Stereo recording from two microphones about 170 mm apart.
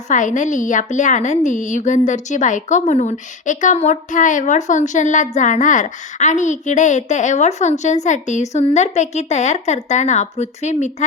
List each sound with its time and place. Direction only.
0.1 s a woman's voice: 45° left (ahead or behind)